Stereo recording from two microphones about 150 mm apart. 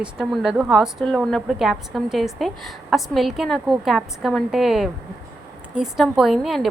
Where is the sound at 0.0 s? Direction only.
5° right (ahead or behind).